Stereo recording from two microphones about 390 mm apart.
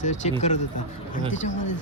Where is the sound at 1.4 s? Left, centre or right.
Left.